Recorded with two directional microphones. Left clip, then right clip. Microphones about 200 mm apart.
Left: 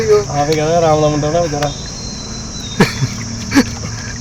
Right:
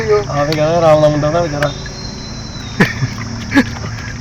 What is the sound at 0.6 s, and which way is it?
Speech, 10° left (ahead or behind).